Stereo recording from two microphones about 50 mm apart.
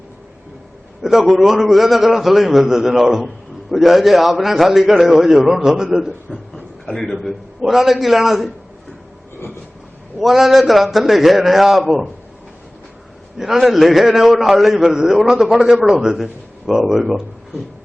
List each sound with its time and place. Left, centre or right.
1.0 s a man's voice: centre
6.8 s a man's voice: centre
10.2 s a man's voice: centre
13.4 s a man's voice: centre